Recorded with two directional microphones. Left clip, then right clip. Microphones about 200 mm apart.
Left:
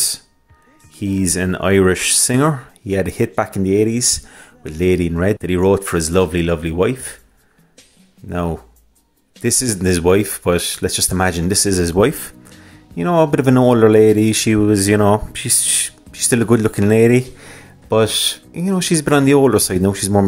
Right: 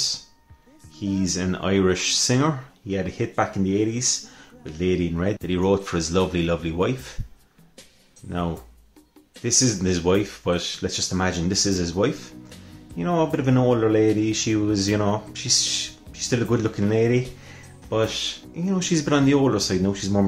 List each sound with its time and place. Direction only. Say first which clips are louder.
0.9 s speech: left 6 dB; 35° left (ahead or behind)
9.4 s speech: left 3 dB; 40° left (ahead or behind)